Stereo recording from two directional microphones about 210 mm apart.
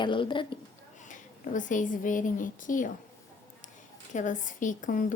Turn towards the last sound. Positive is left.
turn(degrees=40)  # may be behind; listen again after turning